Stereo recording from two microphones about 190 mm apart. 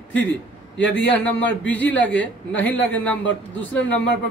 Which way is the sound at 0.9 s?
5° left (ahead or behind).